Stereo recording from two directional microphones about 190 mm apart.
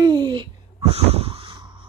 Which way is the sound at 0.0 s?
20° right (ahead or behind).